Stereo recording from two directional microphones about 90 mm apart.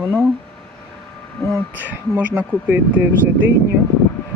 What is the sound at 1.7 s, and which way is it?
Speech, 20° right (ahead or behind).